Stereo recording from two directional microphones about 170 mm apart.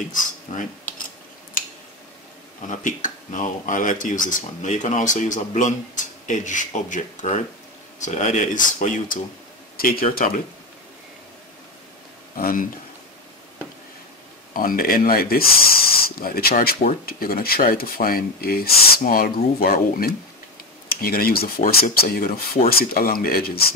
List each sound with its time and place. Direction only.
2.6 s speech: 50° left (ahead or behind)
9.8 s speech: 60° left (ahead or behind)
12.4 s speech: 60° left (ahead or behind)
14.5 s speech: 55° left (ahead or behind)